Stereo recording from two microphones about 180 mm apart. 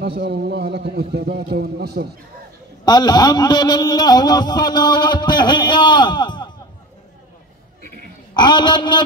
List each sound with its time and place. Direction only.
0.2 s a man's voice: 65° right (ahead or behind)
2.8 s a man's voice: 20° left (ahead or behind)
8.4 s a man's voice: 25° left (ahead or behind)